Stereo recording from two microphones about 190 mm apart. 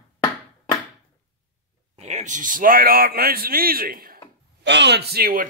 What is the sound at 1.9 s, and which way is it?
A man's voice, 35° right (ahead or behind).